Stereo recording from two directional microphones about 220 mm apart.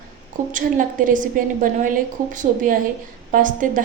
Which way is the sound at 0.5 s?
40° right (ahead or behind).